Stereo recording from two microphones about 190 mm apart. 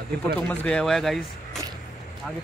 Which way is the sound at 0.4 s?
5° left (ahead or behind).